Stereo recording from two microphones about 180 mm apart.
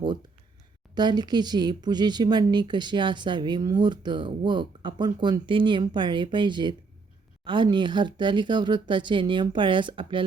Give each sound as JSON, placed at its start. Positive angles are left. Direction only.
{"t": 0.9, "sound": "speech", "side_deg": -25}